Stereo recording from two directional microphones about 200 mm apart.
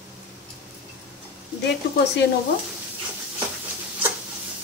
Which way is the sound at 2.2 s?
60° left (ahead or behind).